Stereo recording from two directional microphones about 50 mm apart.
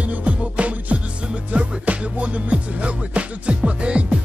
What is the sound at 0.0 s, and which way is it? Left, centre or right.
Music, right.